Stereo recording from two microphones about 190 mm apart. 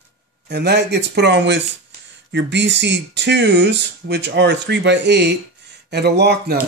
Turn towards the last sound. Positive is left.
turn(degrees=-60)  # may be behind; listen again after turning